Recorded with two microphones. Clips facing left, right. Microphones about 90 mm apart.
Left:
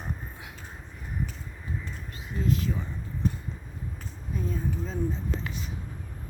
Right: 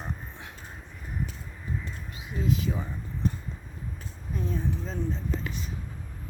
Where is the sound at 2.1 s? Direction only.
5° right (ahead or behind).